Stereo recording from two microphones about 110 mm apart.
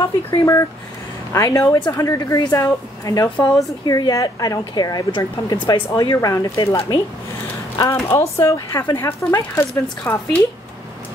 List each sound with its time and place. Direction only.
0.0 s a woman's voice: 30° left (ahead or behind)